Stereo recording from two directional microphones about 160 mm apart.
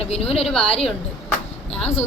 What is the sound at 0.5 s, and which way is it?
Speech, 5° left (ahead or behind).